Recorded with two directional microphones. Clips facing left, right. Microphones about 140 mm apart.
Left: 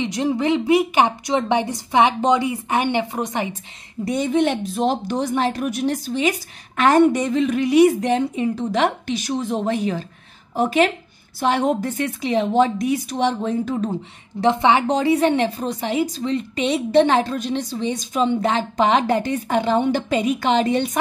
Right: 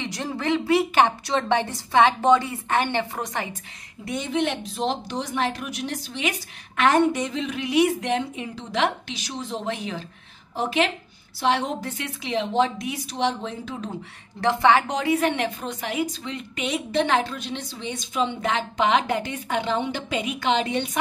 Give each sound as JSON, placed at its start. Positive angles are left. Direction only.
{"t": 0.0, "sound": "a woman's voice", "side_deg": 20}
{"t": 4.0, "sound": "a woman's voice", "side_deg": 40}
{"t": 14.4, "sound": "a woman's voice", "side_deg": 20}
{"t": 14.9, "sound": "a woman's voice", "side_deg": 30}